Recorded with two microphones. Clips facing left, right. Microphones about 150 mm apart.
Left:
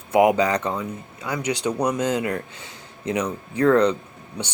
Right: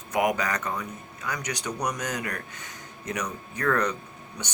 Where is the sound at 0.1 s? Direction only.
25° left (ahead or behind).